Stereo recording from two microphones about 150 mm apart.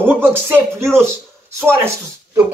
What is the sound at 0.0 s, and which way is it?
Speech, 15° right (ahead or behind).